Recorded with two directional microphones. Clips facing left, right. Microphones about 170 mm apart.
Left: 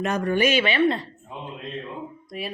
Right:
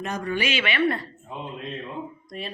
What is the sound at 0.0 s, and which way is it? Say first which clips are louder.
Speech: left 5 dB; 70° left (ahead or behind).